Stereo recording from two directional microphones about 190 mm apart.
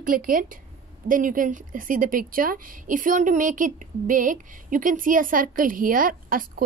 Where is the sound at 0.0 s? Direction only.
45° right (ahead or behind).